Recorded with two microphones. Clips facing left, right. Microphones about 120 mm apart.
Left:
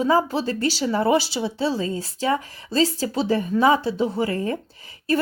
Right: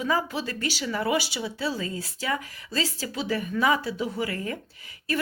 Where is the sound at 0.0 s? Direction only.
35° left (ahead or behind).